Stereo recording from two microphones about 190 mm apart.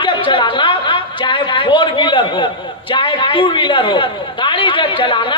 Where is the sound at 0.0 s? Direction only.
25° left (ahead or behind).